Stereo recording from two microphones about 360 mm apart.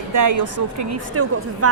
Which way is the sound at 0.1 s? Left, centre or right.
Right.